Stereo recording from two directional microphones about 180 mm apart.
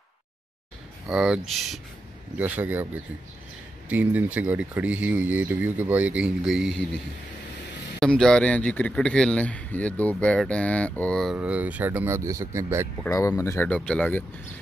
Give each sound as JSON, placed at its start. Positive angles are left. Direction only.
{"t": 1.0, "sound": "speech", "side_deg": -5}
{"t": 6.7, "sound": "speech", "side_deg": -75}
{"t": 8.0, "sound": "a man's voice", "side_deg": 5}
{"t": 11.3, "sound": "speech", "side_deg": -10}
{"t": 13.0, "sound": "a man's voice", "side_deg": 15}